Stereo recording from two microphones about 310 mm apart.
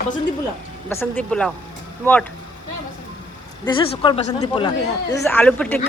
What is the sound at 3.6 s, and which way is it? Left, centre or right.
Speech, centre.